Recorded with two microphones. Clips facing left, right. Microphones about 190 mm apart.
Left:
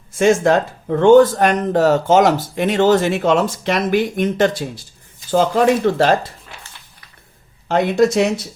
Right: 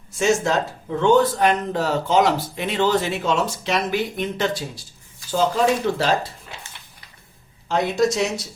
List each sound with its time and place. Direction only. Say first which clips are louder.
0.2 s speech: left 6 dB; 55° left (ahead or behind)
7.7 s speech: left 5 dB; 55° left (ahead or behind)